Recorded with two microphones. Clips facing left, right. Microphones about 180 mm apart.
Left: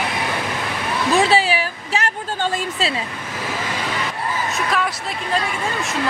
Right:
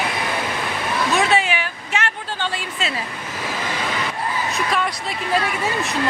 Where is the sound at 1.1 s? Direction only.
35° left (ahead or behind).